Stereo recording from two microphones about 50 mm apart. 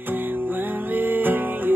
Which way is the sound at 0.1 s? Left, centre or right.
Right.